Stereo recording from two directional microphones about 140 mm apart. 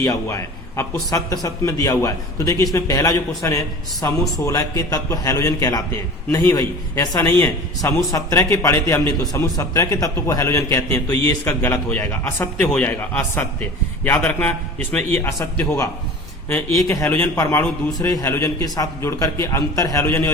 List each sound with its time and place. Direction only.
0.0 s a man's voice: 25° left (ahead or behind)